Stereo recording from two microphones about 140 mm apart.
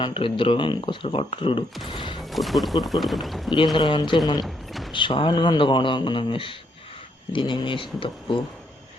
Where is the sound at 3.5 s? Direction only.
35° left (ahead or behind).